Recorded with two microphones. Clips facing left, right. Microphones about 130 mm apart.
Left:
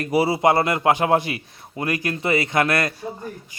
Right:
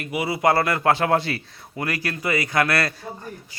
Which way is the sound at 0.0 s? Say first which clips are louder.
Left 4 dB; 35° left (ahead or behind).